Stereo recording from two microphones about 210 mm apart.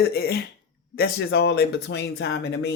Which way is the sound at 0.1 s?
45° left (ahead or behind).